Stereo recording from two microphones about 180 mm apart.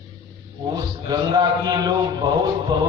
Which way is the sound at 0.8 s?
25° right (ahead or behind).